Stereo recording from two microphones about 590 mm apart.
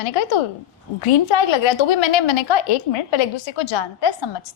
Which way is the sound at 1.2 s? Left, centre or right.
Left.